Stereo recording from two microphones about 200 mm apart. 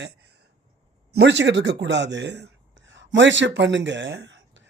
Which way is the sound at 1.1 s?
55° right (ahead or behind).